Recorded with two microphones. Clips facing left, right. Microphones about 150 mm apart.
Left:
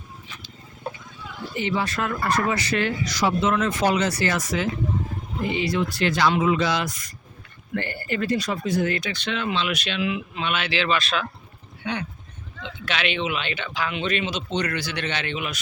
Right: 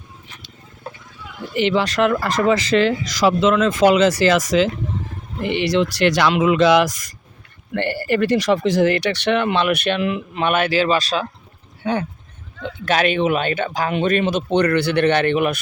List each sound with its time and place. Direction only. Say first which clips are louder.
1.5 s speech: right 8 dB; 90° right
5.4 s speech: right 6 dB; 70° right (ahead or behind); by 7.1 s 85° right
7.8 s speech: right 8 dB; 70° right (ahead or behind); by 15.5 s 55° right (ahead or behind)